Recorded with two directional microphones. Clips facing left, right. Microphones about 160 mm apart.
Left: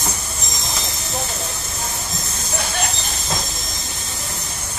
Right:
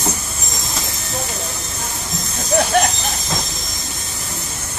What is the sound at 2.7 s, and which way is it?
Train, 60° right (ahead or behind).